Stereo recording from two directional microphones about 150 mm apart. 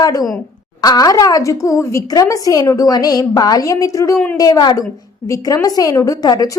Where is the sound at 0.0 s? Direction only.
25° left (ahead or behind).